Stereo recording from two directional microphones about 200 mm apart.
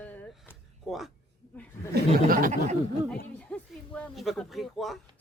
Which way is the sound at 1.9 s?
45° right (ahead or behind).